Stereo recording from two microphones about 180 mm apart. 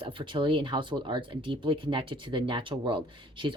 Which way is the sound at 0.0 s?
30° right (ahead or behind).